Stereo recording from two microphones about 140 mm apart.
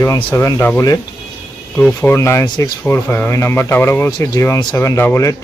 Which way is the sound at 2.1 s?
20° left (ahead or behind).